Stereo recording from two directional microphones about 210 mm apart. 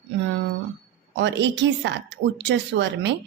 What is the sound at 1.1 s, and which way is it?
A woman's voice, 55° right (ahead or behind).